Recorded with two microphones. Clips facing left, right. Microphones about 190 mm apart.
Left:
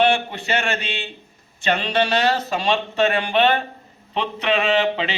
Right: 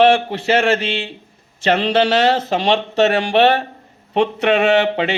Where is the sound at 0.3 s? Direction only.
90° right.